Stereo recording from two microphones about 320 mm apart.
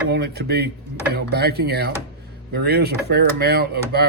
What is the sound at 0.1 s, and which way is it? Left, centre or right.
Speech, right.